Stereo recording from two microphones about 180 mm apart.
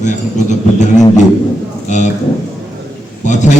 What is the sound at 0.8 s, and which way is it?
Didgeridoo, 40° left (ahead or behind).